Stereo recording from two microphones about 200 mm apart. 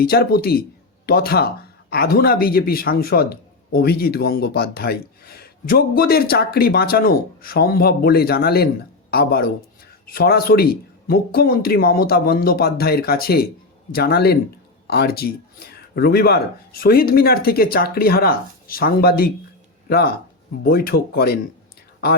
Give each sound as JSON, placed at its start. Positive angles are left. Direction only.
{"t": 0.0, "sound": "speech", "side_deg": 50}